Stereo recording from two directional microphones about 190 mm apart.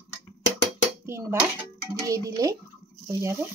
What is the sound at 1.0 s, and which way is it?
Speech, 10° right (ahead or behind).